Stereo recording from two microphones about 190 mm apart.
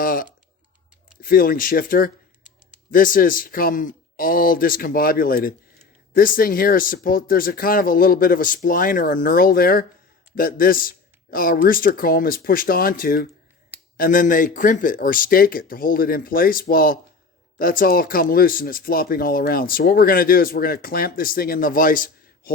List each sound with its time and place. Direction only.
0.0 s typing: 45° left (ahead or behind)
1.2 s speech: 50° left (ahead or behind)